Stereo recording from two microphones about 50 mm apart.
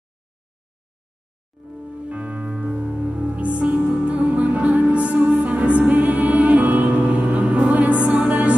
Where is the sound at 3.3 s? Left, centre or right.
Right.